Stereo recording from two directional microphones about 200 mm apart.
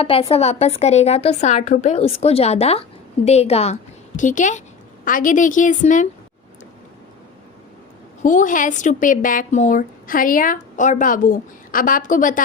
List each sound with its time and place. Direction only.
0.0 s a woman's voice: 30° left (ahead or behind)
8.2 s a woman's voice: 40° left (ahead or behind)